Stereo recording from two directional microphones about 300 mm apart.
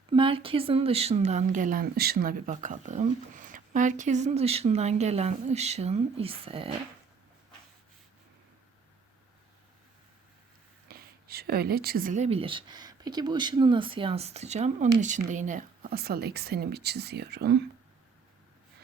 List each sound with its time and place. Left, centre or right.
0.1 s a woman's voice: centre
10.8 s a woman's voice: right